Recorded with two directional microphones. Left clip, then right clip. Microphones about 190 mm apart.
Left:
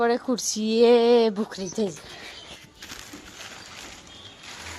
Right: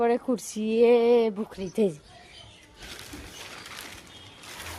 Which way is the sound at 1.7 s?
30° right (ahead or behind).